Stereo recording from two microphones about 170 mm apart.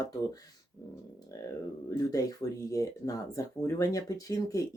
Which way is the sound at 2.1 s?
20° left (ahead or behind).